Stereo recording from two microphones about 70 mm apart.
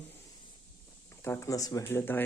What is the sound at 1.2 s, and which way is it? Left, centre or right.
Speech, left.